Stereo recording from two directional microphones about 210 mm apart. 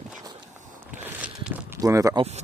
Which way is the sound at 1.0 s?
5° right (ahead or behind).